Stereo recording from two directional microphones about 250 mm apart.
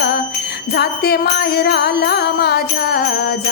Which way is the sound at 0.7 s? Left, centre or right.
Left.